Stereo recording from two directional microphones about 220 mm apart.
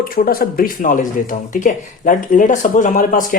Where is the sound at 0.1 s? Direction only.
40° left (ahead or behind).